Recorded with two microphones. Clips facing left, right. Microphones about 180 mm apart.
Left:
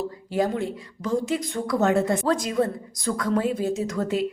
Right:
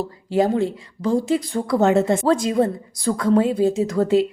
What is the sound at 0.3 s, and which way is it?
A woman's voice, 25° right (ahead or behind).